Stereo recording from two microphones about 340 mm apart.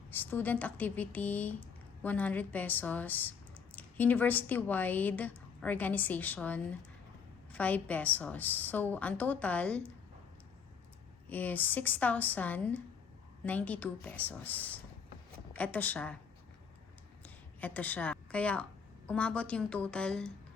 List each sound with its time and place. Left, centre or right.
0.1 s speech: centre
11.3 s speech: centre
17.2 s a woman's voice: centre